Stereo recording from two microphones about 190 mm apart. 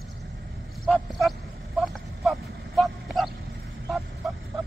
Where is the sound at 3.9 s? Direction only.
Centre (ahead or behind).